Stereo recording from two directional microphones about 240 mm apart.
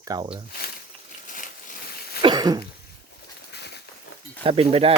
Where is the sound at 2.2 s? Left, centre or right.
Centre.